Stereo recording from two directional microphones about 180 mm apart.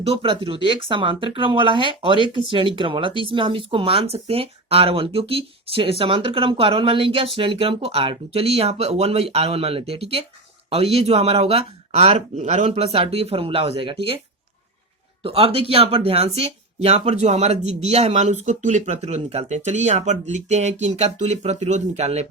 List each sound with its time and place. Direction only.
0.0 s speech: 30° right (ahead or behind)
15.2 s speech: 30° right (ahead or behind)